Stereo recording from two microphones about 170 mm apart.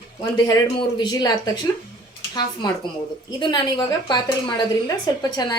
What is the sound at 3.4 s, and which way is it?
Speech, 25° left (ahead or behind).